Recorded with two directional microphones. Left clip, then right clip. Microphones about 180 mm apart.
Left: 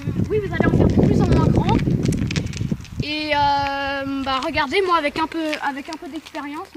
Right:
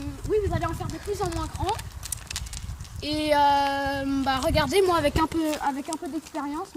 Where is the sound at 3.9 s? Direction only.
45° right (ahead or behind).